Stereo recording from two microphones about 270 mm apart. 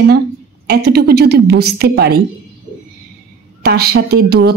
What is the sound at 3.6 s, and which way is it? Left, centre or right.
Speech, right.